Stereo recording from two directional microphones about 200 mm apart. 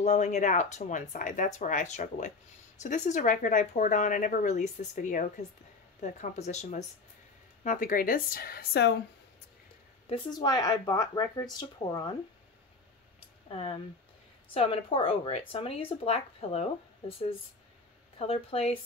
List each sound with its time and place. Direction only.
0.0 s speech: 35° left (ahead or behind); by 9.0 s 55° left (ahead or behind)
10.0 s speech: 25° left (ahead or behind)
14.5 s speech: 30° left (ahead or behind)
18.2 s speech: 30° left (ahead or behind)